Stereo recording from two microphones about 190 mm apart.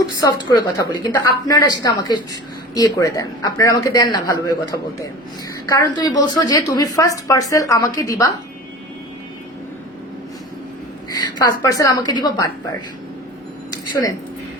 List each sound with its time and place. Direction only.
0.2 s a woman's voice: 20° left (ahead or behind)
11.1 s a woman's voice: 20° left (ahead or behind)
13.7 s a sound: 20° left (ahead or behind)